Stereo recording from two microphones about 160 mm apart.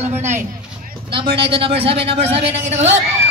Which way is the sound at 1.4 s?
35° right (ahead or behind).